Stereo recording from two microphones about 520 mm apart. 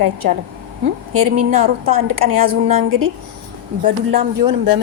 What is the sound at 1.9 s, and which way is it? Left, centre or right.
A woman's voice, right.